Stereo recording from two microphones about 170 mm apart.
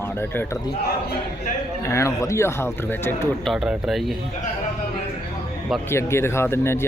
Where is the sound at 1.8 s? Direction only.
15° left (ahead or behind).